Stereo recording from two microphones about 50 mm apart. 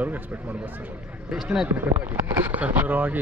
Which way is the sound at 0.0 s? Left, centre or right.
Right.